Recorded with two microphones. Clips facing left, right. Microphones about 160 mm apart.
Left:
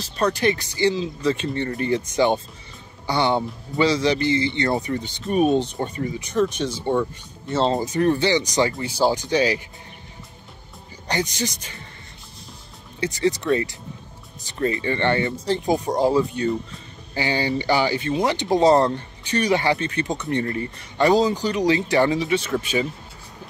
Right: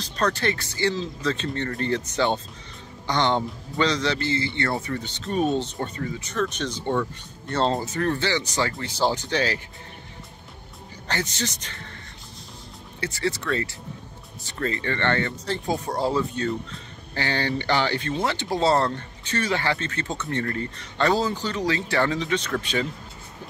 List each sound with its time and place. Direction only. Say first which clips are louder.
0.0 s speech: left 4 dB; 10° left (ahead or behind)
7.8 s speech: left 6 dB; 15° left (ahead or behind)
11.1 s speech: left 4 dB; 15° left (ahead or behind)
13.0 s speech: left 6 dB; 15° left (ahead or behind)